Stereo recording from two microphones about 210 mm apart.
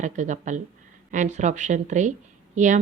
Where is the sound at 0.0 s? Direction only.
35° right (ahead or behind).